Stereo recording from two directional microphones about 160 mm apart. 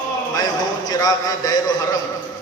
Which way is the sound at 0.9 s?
25° left (ahead or behind).